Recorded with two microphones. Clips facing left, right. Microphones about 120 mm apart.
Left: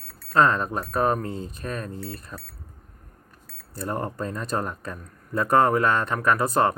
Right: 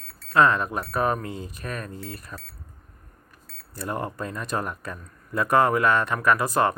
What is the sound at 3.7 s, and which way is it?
Speech, 35° left (ahead or behind).